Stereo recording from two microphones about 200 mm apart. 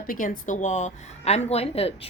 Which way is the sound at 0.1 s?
40° left (ahead or behind).